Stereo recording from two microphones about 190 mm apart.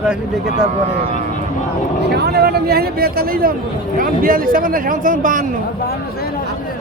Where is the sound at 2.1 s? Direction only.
60° right (ahead or behind).